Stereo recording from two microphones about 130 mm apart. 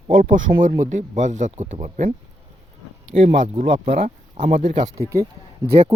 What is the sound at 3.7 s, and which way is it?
Speech, 50° right (ahead or behind).